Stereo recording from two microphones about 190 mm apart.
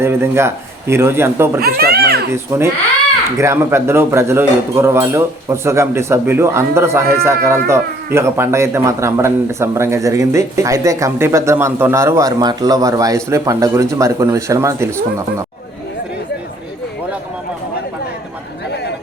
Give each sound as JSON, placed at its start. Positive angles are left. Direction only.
{"t": 0.0, "sound": "a man's voice", "side_deg": -15}
{"t": 1.6, "sound": "a child's voice", "side_deg": -55}
{"t": 2.3, "sound": "a man's voice", "side_deg": -15}